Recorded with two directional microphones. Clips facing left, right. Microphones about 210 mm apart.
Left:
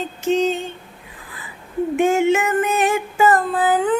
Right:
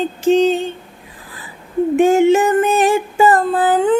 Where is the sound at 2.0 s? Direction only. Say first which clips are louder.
Right 5 dB; 35° right (ahead or behind).